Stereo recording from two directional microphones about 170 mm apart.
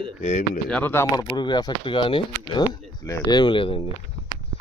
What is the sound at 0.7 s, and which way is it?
Speech, 10° left (ahead or behind).